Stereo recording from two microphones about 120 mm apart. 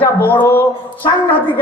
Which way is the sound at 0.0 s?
15° left (ahead or behind).